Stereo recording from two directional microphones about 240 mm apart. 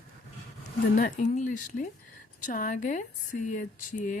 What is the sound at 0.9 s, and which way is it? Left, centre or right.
Speech, left.